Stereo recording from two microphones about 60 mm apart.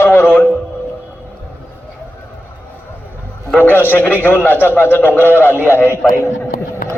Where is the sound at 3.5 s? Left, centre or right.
Left.